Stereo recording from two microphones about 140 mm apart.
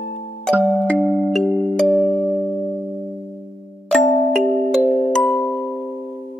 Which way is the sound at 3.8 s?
5° left (ahead or behind).